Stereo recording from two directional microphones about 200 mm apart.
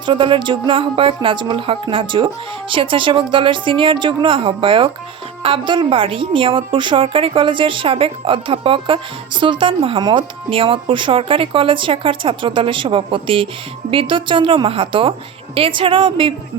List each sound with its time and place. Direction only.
0.0 s a woman's voice: 25° right (ahead or behind)